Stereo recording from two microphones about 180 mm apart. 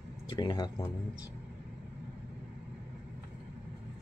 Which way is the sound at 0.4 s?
25° left (ahead or behind).